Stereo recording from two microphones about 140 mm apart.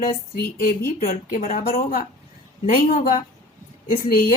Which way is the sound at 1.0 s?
80° left.